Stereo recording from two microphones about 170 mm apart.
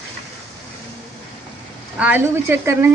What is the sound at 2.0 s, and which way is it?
Speech, 10° right (ahead or behind).